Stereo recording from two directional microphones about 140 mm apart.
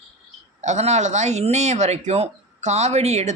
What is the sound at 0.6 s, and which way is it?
A man's voice, 55° right (ahead or behind).